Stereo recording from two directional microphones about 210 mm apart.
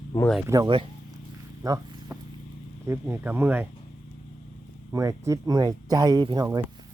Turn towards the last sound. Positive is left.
turn(degrees=-20)  # may be behind; listen again after turning